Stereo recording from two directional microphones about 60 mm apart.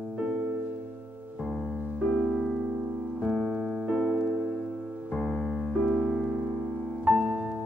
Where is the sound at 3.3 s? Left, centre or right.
Centre.